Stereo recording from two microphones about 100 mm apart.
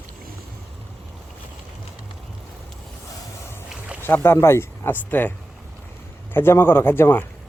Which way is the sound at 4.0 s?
25° left (ahead or behind).